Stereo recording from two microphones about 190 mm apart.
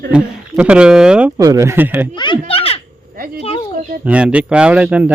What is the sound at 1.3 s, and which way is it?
Speech, 15° right (ahead or behind).